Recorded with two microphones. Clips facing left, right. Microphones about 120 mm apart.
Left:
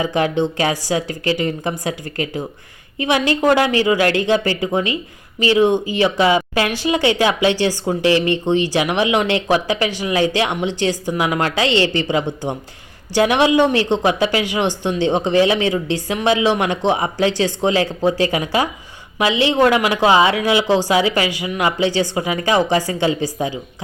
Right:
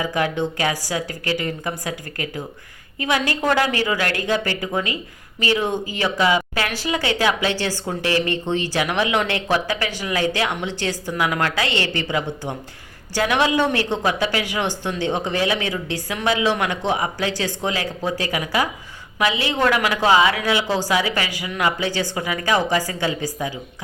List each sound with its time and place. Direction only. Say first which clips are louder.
0.0 s a woman's voice: left 4 dB; 25° left (ahead or behind)